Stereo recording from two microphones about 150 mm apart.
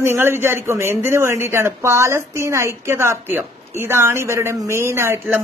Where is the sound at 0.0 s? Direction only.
15° right (ahead or behind).